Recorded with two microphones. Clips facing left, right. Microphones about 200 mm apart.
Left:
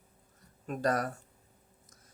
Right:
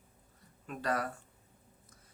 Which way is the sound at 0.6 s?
40° left (ahead or behind).